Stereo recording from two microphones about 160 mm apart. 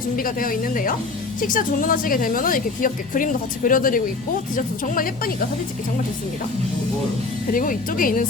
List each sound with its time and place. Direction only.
0.2 s speech: 60° left (ahead or behind)
7.5 s speech: 60° left (ahead or behind)